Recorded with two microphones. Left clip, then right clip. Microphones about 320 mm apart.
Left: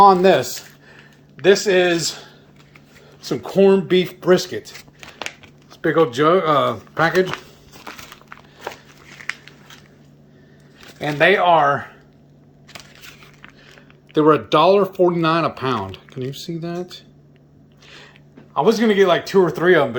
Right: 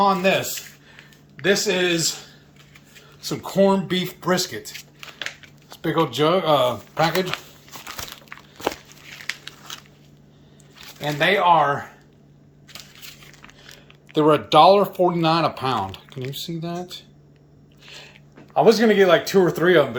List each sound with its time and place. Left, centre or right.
0.0 s speech: centre
1.4 s speech: centre
3.2 s speech: centre
5.8 s speech: centre
11.0 s speech: centre
14.1 s speech: centre
17.8 s biting: centre
18.5 s speech: centre